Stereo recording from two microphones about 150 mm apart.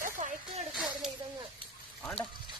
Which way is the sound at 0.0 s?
55° right (ahead or behind).